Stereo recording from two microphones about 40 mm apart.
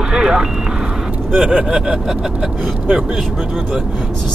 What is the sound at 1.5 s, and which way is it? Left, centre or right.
Speech, centre.